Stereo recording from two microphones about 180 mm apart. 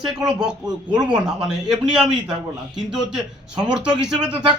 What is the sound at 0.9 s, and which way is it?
Speech, 25° right (ahead or behind).